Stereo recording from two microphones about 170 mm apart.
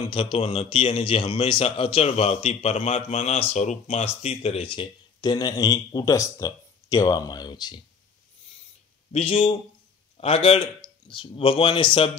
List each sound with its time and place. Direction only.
0.0 s a man's voice: 30° left (ahead or behind)
9.1 s a man's voice: 30° left (ahead or behind)